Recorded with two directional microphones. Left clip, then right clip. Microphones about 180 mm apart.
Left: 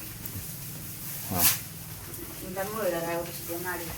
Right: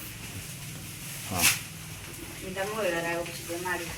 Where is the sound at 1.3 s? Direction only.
15° left (ahead or behind).